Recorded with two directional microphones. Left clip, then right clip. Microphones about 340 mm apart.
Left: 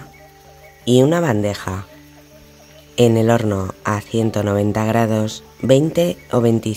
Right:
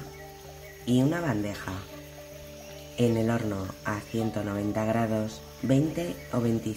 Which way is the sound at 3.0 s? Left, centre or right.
Left.